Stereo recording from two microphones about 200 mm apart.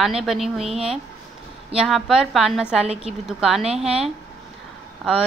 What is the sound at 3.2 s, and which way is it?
Speech, centre (ahead or behind).